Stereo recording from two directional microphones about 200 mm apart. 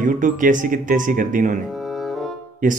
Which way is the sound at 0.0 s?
40° right (ahead or behind).